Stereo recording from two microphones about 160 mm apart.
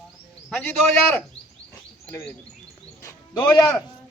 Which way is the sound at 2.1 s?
15° left (ahead or behind).